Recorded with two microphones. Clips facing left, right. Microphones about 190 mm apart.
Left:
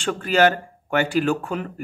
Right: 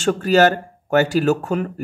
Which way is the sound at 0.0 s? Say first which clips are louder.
Right 4 dB; 40° right (ahead or behind).